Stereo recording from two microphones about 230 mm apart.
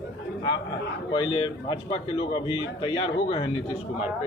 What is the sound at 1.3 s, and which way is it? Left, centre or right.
A man's voice, centre.